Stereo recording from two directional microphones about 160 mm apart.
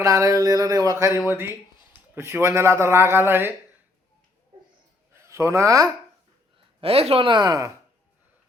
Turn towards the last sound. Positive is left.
turn(degrees=-20)  # may be behind; listen again after turning